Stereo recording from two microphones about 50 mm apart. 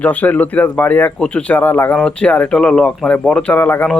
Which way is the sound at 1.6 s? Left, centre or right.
Left.